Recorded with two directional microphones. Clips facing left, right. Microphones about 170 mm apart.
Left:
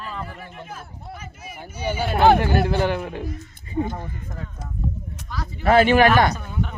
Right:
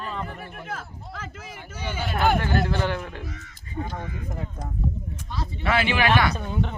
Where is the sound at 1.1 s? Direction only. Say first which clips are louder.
Right 2 dB; 90° right.